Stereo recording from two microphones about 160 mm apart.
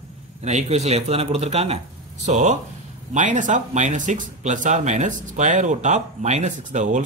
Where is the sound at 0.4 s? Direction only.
45° right (ahead or behind).